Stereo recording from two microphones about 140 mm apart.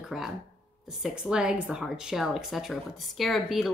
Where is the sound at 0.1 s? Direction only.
5° right (ahead or behind).